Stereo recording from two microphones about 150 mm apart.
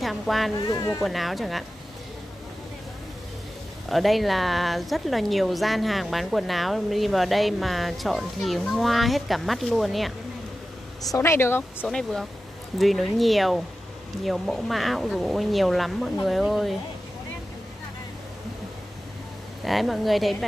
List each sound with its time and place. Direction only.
0.0 s speech: centre (ahead or behind)
0.7 s speech: 25° left (ahead or behind)
1.0 s speech: centre (ahead or behind)
3.9 s speech: centre (ahead or behind)
11.1 s speech: 20° left (ahead or behind)
11.9 s speech: centre (ahead or behind)
19.6 s speech: centre (ahead or behind)